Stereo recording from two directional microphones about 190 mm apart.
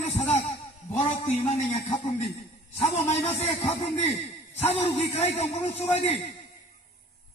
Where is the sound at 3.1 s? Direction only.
30° left (ahead or behind).